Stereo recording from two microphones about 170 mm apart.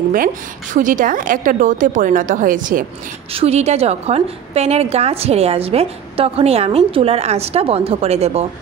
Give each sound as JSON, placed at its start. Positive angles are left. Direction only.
{"t": 0.7, "sound": "a woman's voice", "side_deg": -50}
{"t": 3.3, "sound": "a woman's voice", "side_deg": -40}